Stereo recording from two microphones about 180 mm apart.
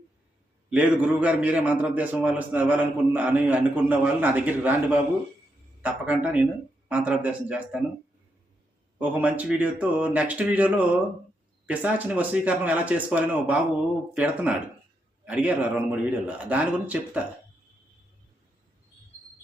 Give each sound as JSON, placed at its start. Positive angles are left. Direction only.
{"t": 0.7, "sound": "a man's voice", "side_deg": -5}
{"t": 5.8, "sound": "a man's voice", "side_deg": -10}
{"t": 9.0, "sound": "a man's voice", "side_deg": -10}